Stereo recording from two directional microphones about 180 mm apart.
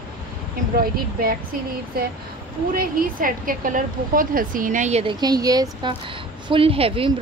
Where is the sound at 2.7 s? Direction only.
50° right (ahead or behind).